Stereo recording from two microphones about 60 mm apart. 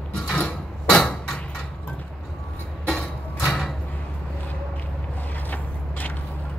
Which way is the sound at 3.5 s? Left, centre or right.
Centre.